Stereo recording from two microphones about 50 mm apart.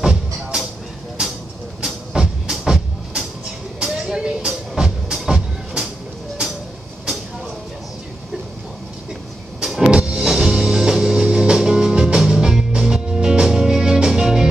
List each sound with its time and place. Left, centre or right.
0.0 s music: centre
1.8 s vehicle: centre
2.5 s music: centre
9.8 s music: centre